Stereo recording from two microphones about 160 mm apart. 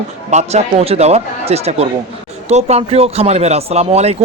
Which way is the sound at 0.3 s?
45° right (ahead or behind).